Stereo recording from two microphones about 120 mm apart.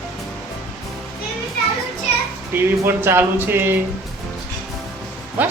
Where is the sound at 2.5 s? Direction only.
20° right (ahead or behind).